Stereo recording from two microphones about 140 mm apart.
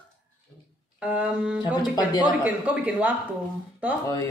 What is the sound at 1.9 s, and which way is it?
Speech, 30° left (ahead or behind).